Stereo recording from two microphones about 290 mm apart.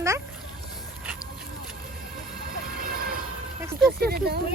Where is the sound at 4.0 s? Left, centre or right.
Right.